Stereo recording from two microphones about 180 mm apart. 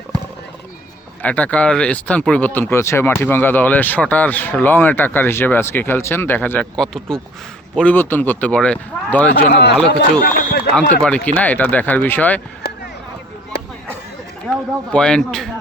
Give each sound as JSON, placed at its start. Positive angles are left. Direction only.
{"t": 1.2, "sound": "speech", "side_deg": 10}
{"t": 9.5, "sound": "a man's voice", "side_deg": 70}
{"t": 10.8, "sound": "a man's voice", "side_deg": 5}
{"t": 14.9, "sound": "a man's voice", "side_deg": 5}